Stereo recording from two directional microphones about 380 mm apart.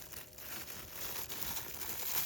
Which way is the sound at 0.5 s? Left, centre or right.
Centre.